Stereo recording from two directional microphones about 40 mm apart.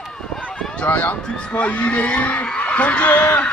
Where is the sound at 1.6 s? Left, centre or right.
Left.